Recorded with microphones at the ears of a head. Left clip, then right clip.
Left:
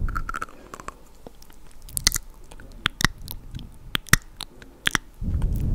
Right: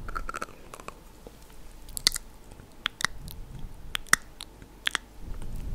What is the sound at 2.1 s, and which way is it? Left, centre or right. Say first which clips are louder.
Chewing: left 7 dB; left.